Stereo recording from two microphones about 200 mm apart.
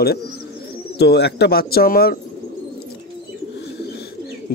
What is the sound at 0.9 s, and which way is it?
Speech, 55° left (ahead or behind).